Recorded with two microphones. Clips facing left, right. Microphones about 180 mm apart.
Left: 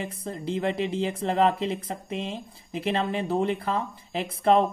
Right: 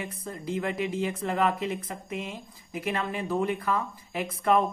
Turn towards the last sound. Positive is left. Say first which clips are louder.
# left 3 dB
turn(degrees=30)  # may be behind; listen again after turning